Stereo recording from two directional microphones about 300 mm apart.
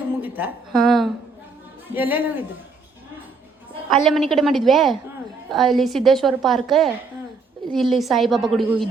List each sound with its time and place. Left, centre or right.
0.2 s a woman's voice: centre
4.0 s a woman's voice: centre